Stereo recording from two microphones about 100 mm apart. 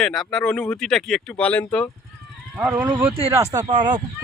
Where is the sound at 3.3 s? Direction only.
35° right (ahead or behind).